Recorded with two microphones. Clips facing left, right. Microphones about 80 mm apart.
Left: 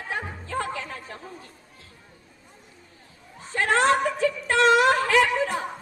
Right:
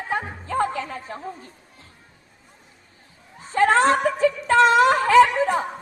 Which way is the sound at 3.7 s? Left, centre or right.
Right.